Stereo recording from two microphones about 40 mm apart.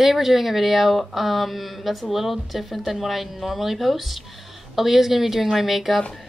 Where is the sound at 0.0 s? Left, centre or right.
Centre.